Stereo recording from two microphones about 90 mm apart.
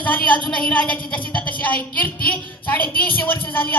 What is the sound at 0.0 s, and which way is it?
A woman's voice, 15° left (ahead or behind).